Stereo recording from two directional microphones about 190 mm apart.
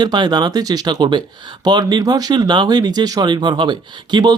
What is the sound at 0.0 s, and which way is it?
Speech, 20° right (ahead or behind).